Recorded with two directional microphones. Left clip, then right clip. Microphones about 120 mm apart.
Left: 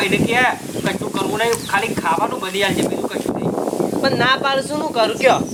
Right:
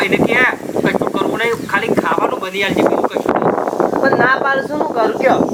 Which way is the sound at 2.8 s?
45° right (ahead or behind).